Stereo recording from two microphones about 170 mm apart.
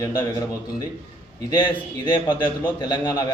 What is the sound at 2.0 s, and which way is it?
A man's voice, 25° left (ahead or behind).